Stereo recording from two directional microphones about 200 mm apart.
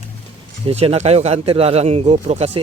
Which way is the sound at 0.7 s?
30° right (ahead or behind).